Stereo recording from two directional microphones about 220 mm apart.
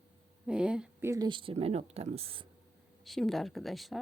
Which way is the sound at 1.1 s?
20° right (ahead or behind).